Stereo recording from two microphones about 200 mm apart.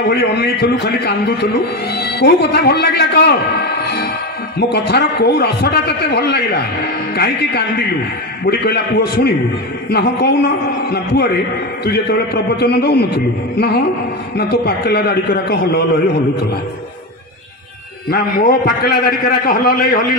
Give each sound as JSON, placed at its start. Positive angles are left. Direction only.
{"t": 0.1, "sound": "a man's voice", "side_deg": 55}
{"t": 4.6, "sound": "a man's voice", "side_deg": 55}
{"t": 8.5, "sound": "a man's voice", "side_deg": 55}
{"t": 12.5, "sound": "a man's voice", "side_deg": 55}
{"t": 18.1, "sound": "a man's voice", "side_deg": 50}